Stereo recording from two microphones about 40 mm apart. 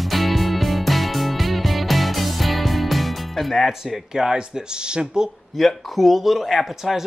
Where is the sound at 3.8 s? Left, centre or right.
Centre.